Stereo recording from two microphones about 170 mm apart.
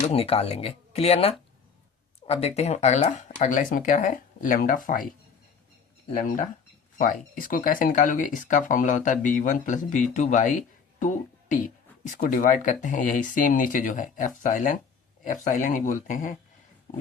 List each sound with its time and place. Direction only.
0.1 s speech: 35° left (ahead or behind); by 5.1 s 55° left (ahead or behind)
7.0 s speech: 55° left (ahead or behind)